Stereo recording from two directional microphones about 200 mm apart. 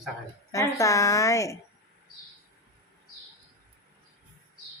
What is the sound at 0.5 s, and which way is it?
A woman's voice, 15° left (ahead or behind).